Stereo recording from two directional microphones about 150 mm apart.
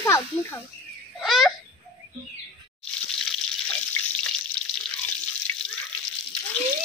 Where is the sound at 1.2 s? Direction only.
Centre (ahead or behind).